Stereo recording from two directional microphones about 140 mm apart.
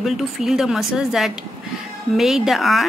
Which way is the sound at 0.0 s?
Centre (ahead or behind).